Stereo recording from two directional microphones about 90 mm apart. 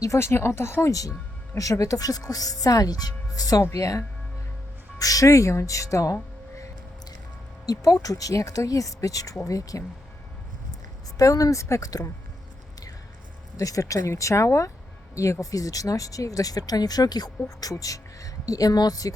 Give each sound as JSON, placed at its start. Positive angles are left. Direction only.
{"t": 0.0, "sound": "speech", "side_deg": 30}
{"t": 7.6, "sound": "speech", "side_deg": 40}
{"t": 11.2, "sound": "speech", "side_deg": 40}
{"t": 13.6, "sound": "speech", "side_deg": 40}